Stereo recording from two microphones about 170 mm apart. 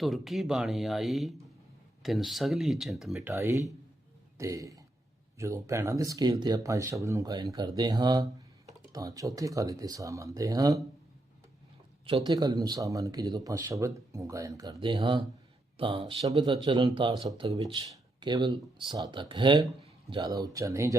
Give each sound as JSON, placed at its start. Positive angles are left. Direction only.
{"t": 0.0, "sound": "speech", "side_deg": 0}
{"t": 3.2, "sound": "speech", "side_deg": -15}
{"t": 12.0, "sound": "speech", "side_deg": -25}